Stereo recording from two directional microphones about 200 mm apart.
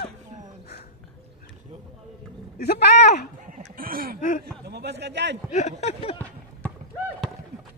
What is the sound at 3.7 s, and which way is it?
A man's voice, 45° right (ahead or behind).